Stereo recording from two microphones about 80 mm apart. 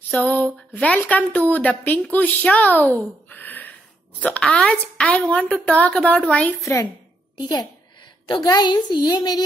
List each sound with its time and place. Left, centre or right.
0.1 s a woman's voice: centre
4.4 s speech: centre
5.1 s a woman's voice: centre
6.6 s a woman's voice: left
8.3 s a woman's voice: left